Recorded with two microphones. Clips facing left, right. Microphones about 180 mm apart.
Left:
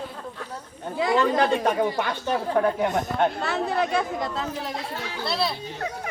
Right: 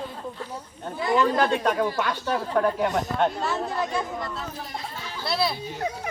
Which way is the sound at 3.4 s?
65° left (ahead or behind).